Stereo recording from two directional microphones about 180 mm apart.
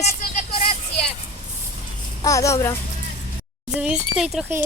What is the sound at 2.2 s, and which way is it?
Speech, 20° left (ahead or behind).